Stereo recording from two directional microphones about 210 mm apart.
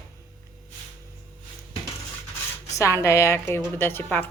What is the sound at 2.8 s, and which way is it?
Speech, 15° left (ahead or behind).